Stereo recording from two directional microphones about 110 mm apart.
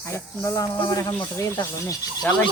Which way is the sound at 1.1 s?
20° left (ahead or behind).